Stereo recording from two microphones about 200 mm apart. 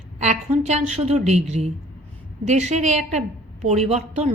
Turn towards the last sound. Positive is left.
turn(degrees=-35)  # may be behind; listen again after turning